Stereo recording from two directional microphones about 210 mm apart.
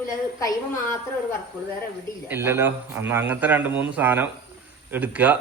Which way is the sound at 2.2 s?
10° right (ahead or behind).